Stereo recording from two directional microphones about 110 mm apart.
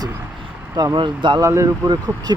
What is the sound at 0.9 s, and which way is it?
Speech, 45° right (ahead or behind).